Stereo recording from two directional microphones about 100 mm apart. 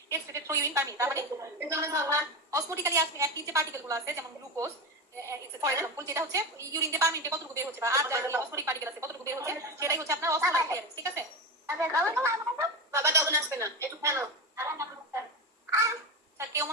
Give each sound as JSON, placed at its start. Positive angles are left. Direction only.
{"t": 0.1, "sound": "a woman's voice", "side_deg": -30}